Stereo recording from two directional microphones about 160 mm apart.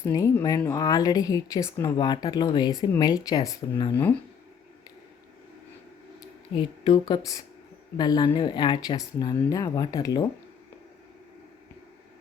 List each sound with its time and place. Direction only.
0.0 s speech: 20° left (ahead or behind)
6.5 s speech: 30° left (ahead or behind)